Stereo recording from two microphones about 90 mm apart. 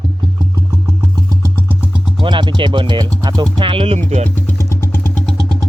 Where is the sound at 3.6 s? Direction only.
90° right.